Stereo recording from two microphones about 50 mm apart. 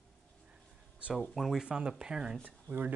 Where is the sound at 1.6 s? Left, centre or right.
Centre.